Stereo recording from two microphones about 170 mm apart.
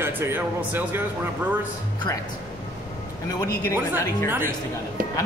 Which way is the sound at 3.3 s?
20° left (ahead or behind).